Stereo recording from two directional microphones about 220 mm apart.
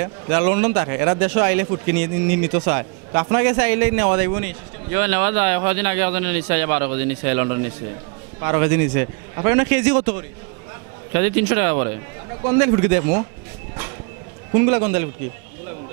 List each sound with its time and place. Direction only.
0.0 s a man's voice: 15° right (ahead or behind)
14.6 s a man's voice: 15° right (ahead or behind)